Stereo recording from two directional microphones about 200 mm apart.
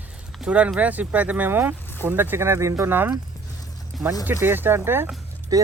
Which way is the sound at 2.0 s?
10° right (ahead or behind).